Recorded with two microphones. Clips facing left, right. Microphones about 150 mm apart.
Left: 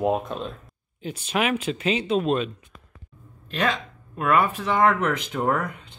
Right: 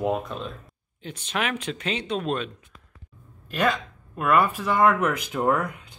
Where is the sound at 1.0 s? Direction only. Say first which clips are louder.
Left 4 dB; 10° left (ahead or behind).